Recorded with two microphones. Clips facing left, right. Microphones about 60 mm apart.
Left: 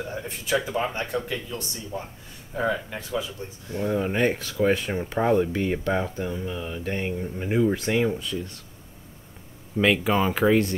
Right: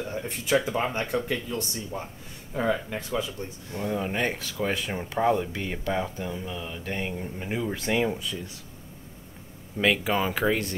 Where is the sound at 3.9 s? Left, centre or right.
Centre.